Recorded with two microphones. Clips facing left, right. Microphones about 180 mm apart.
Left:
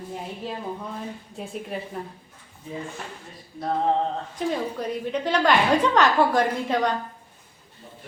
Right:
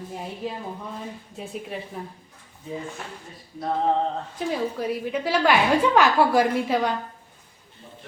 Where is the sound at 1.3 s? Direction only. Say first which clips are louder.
Left 1 dB; centre (ahead or behind).